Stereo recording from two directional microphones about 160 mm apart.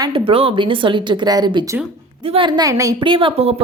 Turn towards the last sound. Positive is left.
turn(degrees=-35)  # may be behind; listen again after turning